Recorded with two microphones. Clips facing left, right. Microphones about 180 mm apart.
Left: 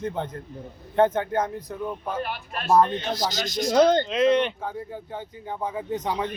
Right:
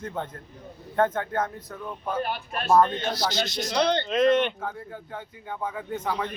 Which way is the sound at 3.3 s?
45° left (ahead or behind).